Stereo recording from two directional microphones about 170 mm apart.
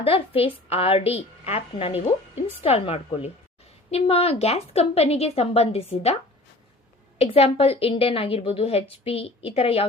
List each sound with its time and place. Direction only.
0.0 s a woman's voice: 35° left (ahead or behind)
7.2 s a woman's voice: 35° left (ahead or behind)